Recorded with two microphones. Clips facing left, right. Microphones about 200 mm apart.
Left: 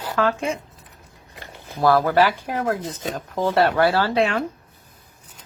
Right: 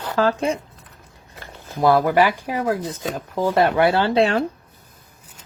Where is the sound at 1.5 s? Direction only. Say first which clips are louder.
Right 1 dB; 20° right (ahead or behind).